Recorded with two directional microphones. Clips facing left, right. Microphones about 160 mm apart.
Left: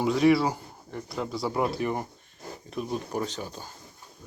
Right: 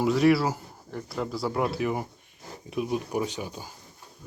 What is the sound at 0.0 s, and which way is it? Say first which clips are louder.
Speech: even; 5° right (ahead or behind).